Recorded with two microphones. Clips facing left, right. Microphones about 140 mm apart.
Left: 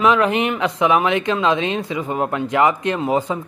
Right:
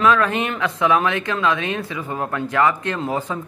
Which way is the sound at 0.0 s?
15° left (ahead or behind).